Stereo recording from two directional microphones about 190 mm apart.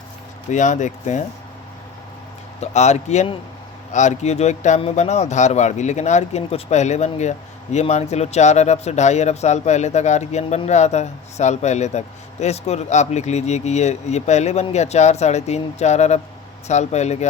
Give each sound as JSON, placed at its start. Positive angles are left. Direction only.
{"t": 0.5, "sound": "speech", "side_deg": 40}
{"t": 2.6, "sound": "speech", "side_deg": 35}